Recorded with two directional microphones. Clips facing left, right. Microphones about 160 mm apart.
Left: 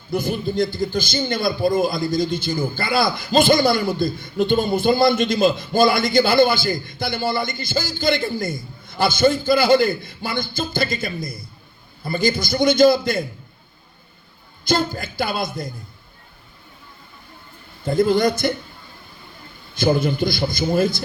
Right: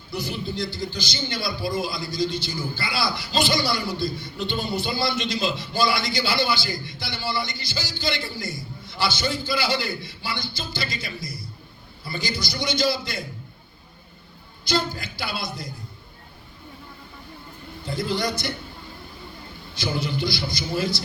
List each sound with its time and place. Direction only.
0.1 s a man's voice: 50° left (ahead or behind)
14.6 s a man's voice: 50° left (ahead or behind)
17.8 s a man's voice: 50° left (ahead or behind)
19.7 s a man's voice: 50° left (ahead or behind)